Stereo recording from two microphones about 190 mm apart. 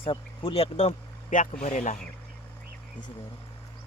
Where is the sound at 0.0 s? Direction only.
30° left (ahead or behind).